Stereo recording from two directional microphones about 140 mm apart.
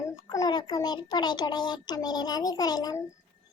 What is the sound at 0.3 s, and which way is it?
A child's voice, 30° left (ahead or behind).